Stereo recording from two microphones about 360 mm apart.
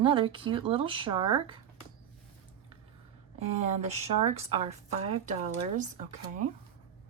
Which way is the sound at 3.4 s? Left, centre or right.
Centre.